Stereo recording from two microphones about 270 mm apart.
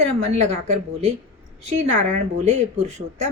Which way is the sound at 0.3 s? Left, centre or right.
Right.